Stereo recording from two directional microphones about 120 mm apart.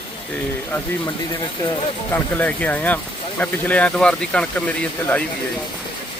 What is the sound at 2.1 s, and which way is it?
Speech, 15° left (ahead or behind).